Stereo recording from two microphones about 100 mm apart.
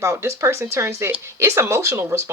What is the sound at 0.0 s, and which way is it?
Speech, 30° right (ahead or behind).